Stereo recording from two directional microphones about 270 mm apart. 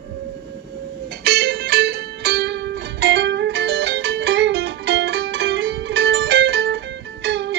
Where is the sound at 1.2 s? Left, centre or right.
Right.